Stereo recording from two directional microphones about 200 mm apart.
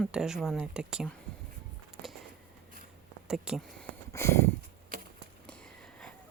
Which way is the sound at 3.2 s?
5° right (ahead or behind).